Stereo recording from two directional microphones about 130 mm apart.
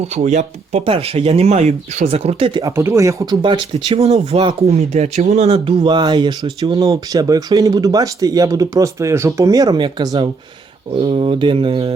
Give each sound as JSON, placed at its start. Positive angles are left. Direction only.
{"t": 0.0, "sound": "speech", "side_deg": -55}
{"t": 2.5, "sound": "speech", "side_deg": -35}
{"t": 2.7, "sound": "speech", "side_deg": -20}
{"t": 3.4, "sound": "speech", "side_deg": -40}
{"t": 3.8, "sound": "speech", "side_deg": -55}